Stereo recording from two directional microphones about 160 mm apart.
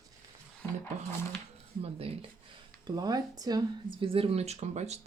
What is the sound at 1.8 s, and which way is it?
Speech, 40° right (ahead or behind).